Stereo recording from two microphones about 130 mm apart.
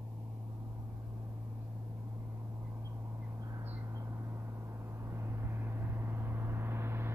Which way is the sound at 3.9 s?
25° right (ahead or behind).